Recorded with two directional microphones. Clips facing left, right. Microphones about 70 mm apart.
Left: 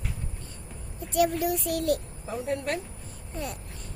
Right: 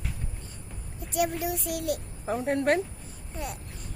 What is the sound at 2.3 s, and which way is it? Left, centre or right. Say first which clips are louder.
Speech: right 5 dB; right.